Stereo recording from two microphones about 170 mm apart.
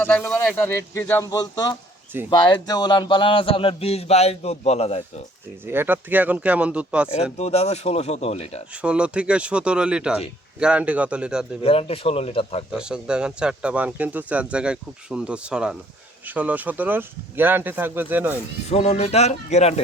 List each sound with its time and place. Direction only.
0.0 s speech: 10° left (ahead or behind); by 5.2 s 35° left (ahead or behind)
5.6 s speech: 15° right (ahead or behind)
7.3 s speech: 40° left (ahead or behind)
8.7 s speech: 5° right (ahead or behind)
11.6 s speech: 35° left (ahead or behind)
12.7 s speech: 5° right (ahead or behind)
18.7 s speech: 40° left (ahead or behind)